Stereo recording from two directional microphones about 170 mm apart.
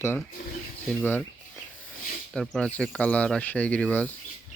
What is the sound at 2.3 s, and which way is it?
Speech, 5° left (ahead or behind).